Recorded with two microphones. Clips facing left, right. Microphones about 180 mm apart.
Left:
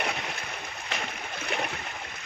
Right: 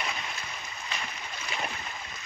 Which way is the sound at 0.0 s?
65° left (ahead or behind).